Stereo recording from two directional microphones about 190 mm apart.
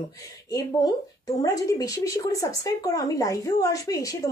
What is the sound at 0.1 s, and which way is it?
A woman's voice, 20° left (ahead or behind).